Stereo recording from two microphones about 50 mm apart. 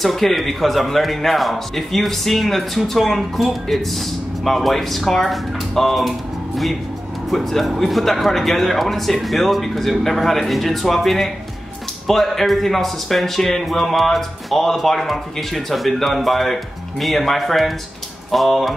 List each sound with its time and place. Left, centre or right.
0.0 s speech: centre